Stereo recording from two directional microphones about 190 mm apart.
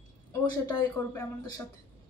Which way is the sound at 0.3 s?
15° left (ahead or behind).